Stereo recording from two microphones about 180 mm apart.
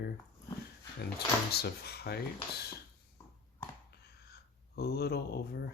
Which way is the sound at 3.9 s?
60° left (ahead or behind).